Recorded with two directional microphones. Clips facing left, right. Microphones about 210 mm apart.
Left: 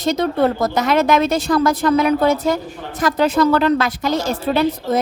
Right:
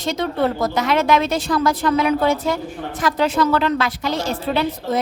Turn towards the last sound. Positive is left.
turn(degrees=45)  # may be behind; listen again after turning